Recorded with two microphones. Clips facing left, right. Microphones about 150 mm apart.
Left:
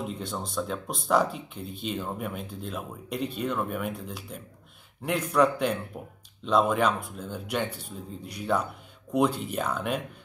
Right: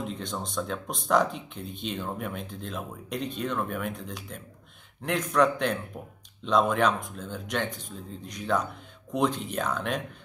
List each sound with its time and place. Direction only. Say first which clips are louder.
0.2 s speech: left 1 dB; 5° left (ahead or behind)